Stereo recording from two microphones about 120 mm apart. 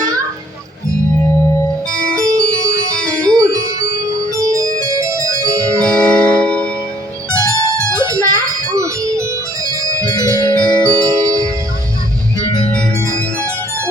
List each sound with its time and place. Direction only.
2.0 s keyboard: 5° left (ahead or behind)
2.3 s keyboard: 25° right (ahead or behind)
3.2 s music: 30° right (ahead or behind)
4.4 s keyboard: 25° right (ahead or behind)
6.0 s music: 5° left (ahead or behind)
7.3 s music: 25° right (ahead or behind)
10.2 s music: 30° left (ahead or behind)
10.9 s music: 30° right (ahead or behind)
12.4 s music: 35° left (ahead or behind)